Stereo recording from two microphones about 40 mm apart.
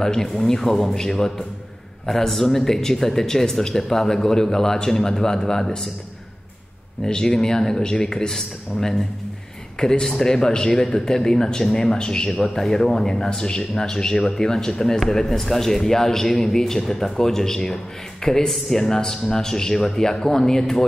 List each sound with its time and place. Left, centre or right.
0.0 s speech: centre
7.1 s a man's voice: centre